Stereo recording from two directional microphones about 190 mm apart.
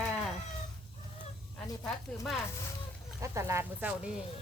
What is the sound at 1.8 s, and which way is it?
Speech, centre (ahead or behind).